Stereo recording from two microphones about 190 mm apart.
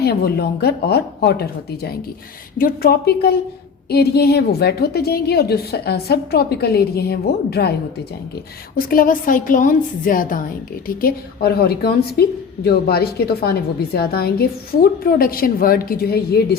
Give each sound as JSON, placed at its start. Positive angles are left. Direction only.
{"t": 0.0, "sound": "a woman's voice", "side_deg": 55}
{"t": 8.7, "sound": "a woman's voice", "side_deg": 50}